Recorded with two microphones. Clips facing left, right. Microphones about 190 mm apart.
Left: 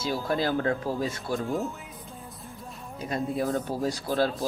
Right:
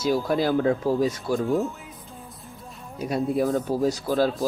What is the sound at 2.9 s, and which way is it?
Speech, 10° right (ahead or behind).